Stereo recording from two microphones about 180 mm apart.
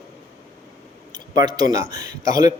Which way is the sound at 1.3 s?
20° right (ahead or behind).